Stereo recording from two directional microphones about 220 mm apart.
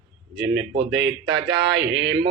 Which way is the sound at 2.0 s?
50° right (ahead or behind).